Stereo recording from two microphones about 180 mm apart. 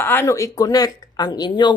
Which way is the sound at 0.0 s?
10° left (ahead or behind).